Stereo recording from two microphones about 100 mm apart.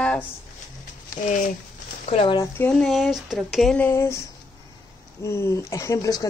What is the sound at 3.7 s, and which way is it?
Speech, 25° left (ahead or behind).